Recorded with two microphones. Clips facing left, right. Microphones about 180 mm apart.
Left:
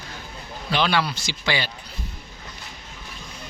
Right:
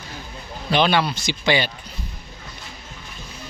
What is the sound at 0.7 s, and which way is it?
Speech, 20° right (ahead or behind).